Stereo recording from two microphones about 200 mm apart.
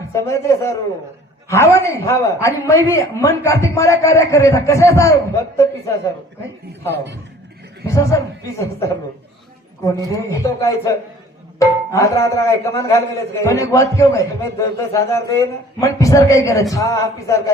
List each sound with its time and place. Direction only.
0.1 s a man's voice: 15° left (ahead or behind)
6.9 s a man's voice: 60° right (ahead or behind)
7.9 s a man's voice: 15° left (ahead or behind)